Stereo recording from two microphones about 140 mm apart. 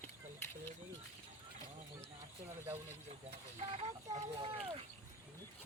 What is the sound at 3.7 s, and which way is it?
Speech, 45° right (ahead or behind).